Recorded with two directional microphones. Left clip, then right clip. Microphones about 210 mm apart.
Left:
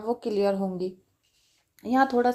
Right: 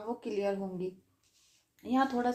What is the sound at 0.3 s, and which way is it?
Speech, 40° left (ahead or behind).